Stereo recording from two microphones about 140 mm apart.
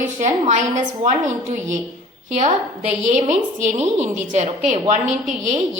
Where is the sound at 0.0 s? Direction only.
60° right (ahead or behind).